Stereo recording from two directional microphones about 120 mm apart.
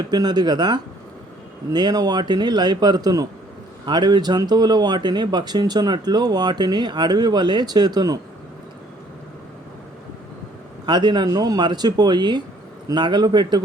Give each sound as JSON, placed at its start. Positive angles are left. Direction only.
{"t": 0.1, "sound": "speech", "side_deg": -35}
{"t": 10.8, "sound": "speech", "side_deg": -40}